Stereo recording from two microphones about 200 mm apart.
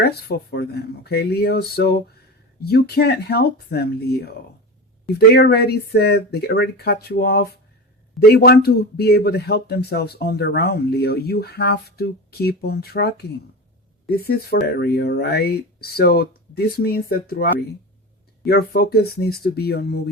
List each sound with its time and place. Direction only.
0.0 s speech: 50° left (ahead or behind)